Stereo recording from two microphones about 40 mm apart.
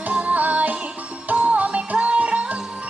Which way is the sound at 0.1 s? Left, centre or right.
Right.